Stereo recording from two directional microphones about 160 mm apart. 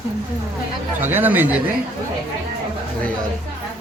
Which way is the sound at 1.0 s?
10° right (ahead or behind).